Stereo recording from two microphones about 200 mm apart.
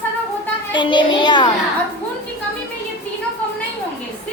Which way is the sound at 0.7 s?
25° left (ahead or behind).